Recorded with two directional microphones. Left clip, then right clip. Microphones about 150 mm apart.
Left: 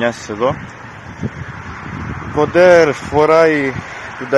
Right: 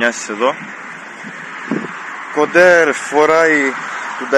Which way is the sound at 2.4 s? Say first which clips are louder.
Left 1 dB; 15° left (ahead or behind).